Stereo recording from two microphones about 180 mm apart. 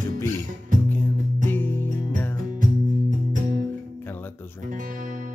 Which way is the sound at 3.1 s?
45° right (ahead or behind).